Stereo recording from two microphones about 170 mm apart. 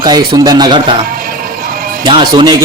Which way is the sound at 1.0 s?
60° right (ahead or behind).